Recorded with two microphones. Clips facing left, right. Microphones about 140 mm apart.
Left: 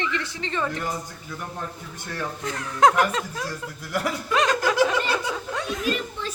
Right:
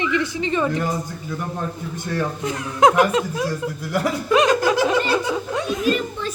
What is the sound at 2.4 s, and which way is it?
Speech, 15° right (ahead or behind).